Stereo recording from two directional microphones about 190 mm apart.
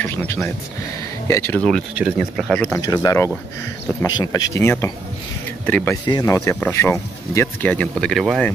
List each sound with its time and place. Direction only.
0.0 s music: 10° left (ahead or behind)
1.2 s speech: 15° left (ahead or behind); by 2.6 s centre (ahead or behind)
2.6 s speech: 15° left (ahead or behind); by 8.5 s centre (ahead or behind)